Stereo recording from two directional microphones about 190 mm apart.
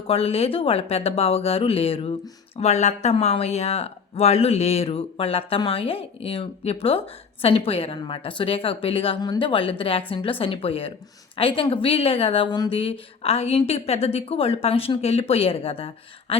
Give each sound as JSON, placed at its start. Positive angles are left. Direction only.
{"t": 0.1, "sound": "a woman's voice", "side_deg": 30}